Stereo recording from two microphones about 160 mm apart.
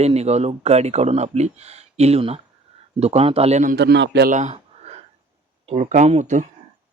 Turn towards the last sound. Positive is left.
turn(degrees=-50)  # may be behind; listen again after turning